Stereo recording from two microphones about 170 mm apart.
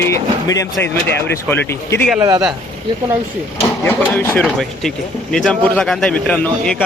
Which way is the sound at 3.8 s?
10° left (ahead or behind).